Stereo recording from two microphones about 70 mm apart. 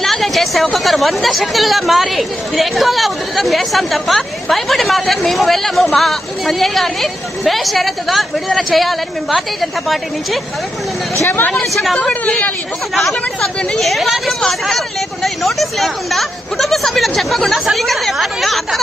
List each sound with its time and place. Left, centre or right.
0.0 s a sound: centre
0.7 s speech: centre
11.2 s a woman's voice: left
11.5 s speech: centre
12.1 s a woman's voice: centre
12.9 s speech: centre